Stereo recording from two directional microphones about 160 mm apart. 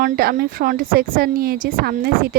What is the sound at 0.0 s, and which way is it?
A woman's voice, 65° right (ahead or behind).